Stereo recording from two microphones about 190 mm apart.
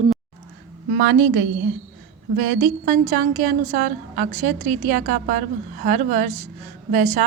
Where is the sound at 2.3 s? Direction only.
50° right (ahead or behind).